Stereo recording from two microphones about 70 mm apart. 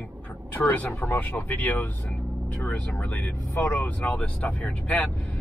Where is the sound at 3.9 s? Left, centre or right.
Left.